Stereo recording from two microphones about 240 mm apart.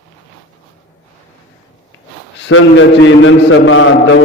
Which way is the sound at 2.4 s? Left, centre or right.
Left.